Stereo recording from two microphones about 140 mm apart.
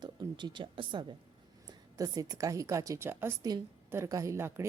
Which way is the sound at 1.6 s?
25° right (ahead or behind).